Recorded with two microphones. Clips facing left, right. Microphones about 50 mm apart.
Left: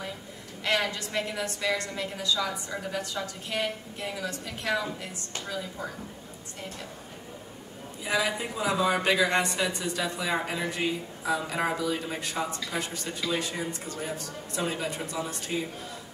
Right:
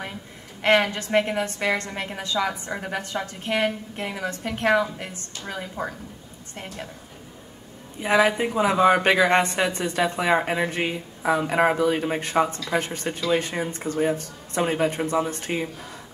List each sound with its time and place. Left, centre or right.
0.6 s speech: right
8.0 s speech: right